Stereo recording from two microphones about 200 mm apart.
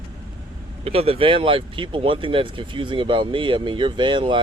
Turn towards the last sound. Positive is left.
turn(degrees=-25)  # may be behind; listen again after turning